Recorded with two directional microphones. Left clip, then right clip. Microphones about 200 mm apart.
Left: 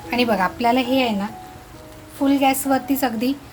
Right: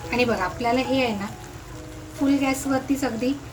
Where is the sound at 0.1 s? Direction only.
50° left (ahead or behind).